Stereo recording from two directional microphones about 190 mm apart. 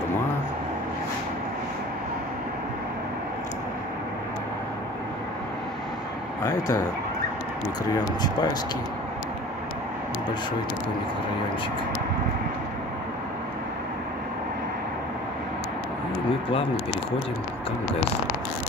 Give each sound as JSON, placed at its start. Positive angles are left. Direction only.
{"t": 6.4, "sound": "speech", "side_deg": 20}
{"t": 7.9, "sound": "speech", "side_deg": 20}